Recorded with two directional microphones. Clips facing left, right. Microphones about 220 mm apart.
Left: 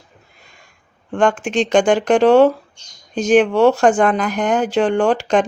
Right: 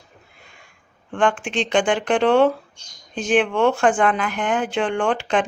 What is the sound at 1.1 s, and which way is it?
Speech, 40° left (ahead or behind).